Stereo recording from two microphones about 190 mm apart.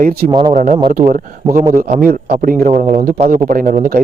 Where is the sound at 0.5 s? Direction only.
40° right (ahead or behind).